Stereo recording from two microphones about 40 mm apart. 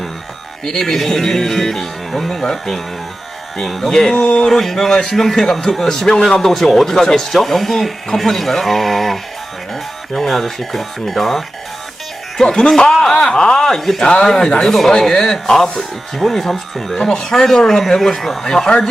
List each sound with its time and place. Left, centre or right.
0.6 s speech: centre
3.8 s speech: centre
4.1 s speech: left
4.4 s speech: centre
12.4 s speech: centre
14.0 s speech: centre